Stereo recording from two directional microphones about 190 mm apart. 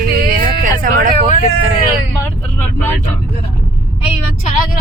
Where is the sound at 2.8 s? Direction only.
10° left (ahead or behind).